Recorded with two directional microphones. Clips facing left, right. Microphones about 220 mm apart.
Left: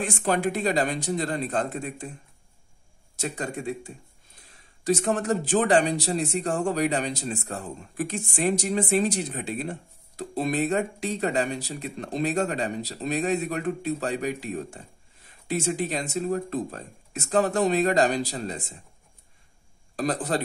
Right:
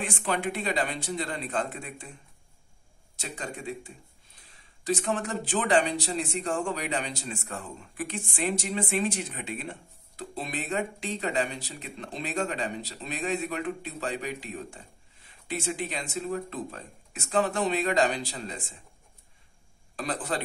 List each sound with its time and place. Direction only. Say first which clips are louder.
0.0 s a man's voice: left 5 dB; 45° left (ahead or behind)
3.2 s a man's voice: left 6 dB; 45° left (ahead or behind)
20.0 s speech: left 5 dB; 40° left (ahead or behind)